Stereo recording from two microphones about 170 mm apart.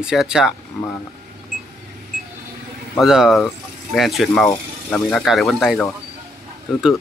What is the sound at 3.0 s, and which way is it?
Speech, centre (ahead or behind).